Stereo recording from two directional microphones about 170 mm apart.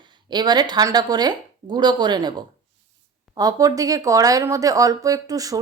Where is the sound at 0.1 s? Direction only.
25° right (ahead or behind).